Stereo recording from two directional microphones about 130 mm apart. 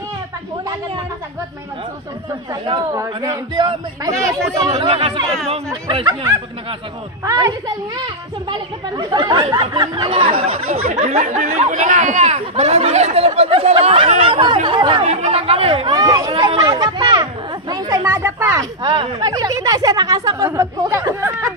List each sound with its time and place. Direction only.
2.9 s speech: 30° right (ahead or behind)
4.1 s speech: 25° right (ahead or behind)
4.7 s speech: 50° right (ahead or behind)
7.2 s speech: 25° right (ahead or behind); by 10.3 s 40° right (ahead or behind)
10.4 s speech: 55° right (ahead or behind); by 15.0 s 35° right (ahead or behind)
15.0 s speech: 50° right (ahead or behind)
15.9 s speech: 30° right (ahead or behind)